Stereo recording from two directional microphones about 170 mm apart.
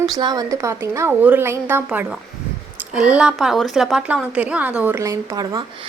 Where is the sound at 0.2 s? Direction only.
25° right (ahead or behind).